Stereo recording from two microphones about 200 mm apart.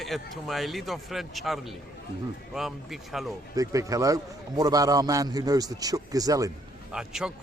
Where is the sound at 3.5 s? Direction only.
15° right (ahead or behind).